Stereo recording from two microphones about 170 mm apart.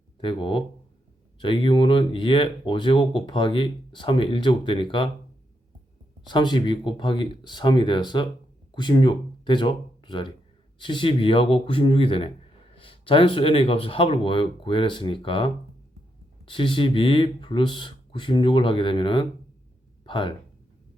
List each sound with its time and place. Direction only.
0.2 s speech: 30° left (ahead or behind)
6.2 s speech: 25° left (ahead or behind)